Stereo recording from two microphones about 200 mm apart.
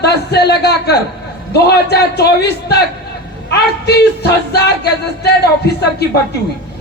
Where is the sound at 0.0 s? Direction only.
55° left (ahead or behind).